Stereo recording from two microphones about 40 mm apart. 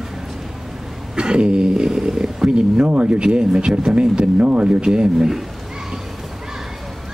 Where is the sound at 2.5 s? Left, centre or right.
Right.